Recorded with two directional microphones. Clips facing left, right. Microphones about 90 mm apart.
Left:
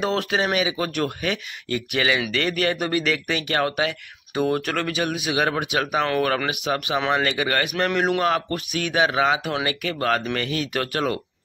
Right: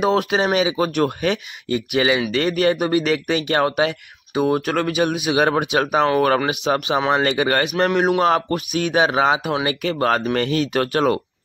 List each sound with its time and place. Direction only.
0.0 s speech: 15° right (ahead or behind)
4.4 s speech: 10° right (ahead or behind); by 9.4 s 30° right (ahead or behind)
9.4 s speech: 10° right (ahead or behind)
9.7 s speech: 30° right (ahead or behind)